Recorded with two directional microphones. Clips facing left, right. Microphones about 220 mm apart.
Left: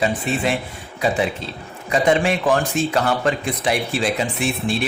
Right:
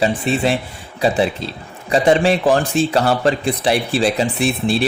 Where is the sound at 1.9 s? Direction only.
35° right (ahead or behind).